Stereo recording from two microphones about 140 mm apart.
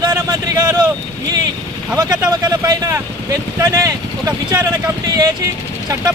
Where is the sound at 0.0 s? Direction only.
30° right (ahead or behind).